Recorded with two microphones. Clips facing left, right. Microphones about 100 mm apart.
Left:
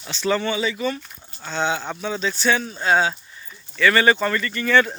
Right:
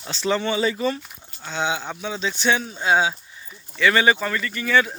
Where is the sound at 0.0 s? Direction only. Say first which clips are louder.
Left 1 dB; 30° right (ahead or behind).